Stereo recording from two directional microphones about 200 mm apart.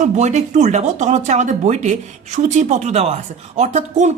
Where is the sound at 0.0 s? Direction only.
35° right (ahead or behind).